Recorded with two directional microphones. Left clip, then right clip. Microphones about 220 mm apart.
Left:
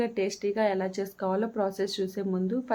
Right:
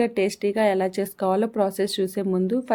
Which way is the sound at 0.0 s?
40° right (ahead or behind).